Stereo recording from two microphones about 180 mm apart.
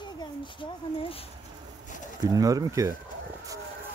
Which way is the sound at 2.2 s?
20° right (ahead or behind).